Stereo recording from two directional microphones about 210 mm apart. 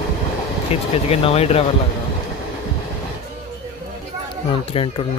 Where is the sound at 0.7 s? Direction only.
30° left (ahead or behind).